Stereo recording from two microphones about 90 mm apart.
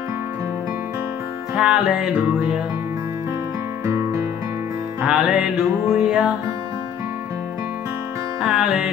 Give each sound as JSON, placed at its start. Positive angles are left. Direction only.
{"t": 1.5, "sound": "music", "side_deg": -5}
{"t": 3.8, "sound": "music", "side_deg": -35}
{"t": 5.0, "sound": "music", "side_deg": -10}
{"t": 8.4, "sound": "music", "side_deg": 0}